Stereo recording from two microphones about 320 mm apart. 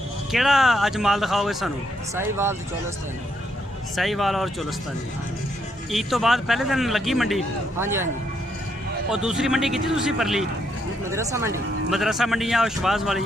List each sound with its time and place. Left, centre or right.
0.3 s a man's voice: centre
3.9 s a man's voice: centre
5.9 s a man's voice: centre
9.0 s a man's voice: centre